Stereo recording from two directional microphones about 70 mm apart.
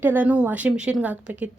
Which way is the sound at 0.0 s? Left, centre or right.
Right.